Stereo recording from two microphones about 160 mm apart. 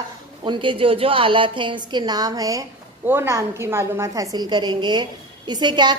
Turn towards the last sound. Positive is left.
turn(degrees=-30)  # may be behind; listen again after turning